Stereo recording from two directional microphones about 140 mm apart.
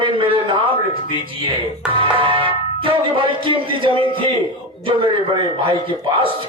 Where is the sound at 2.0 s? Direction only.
40° right (ahead or behind).